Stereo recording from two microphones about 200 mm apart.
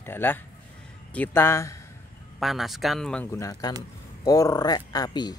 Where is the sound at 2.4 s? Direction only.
Centre (ahead or behind).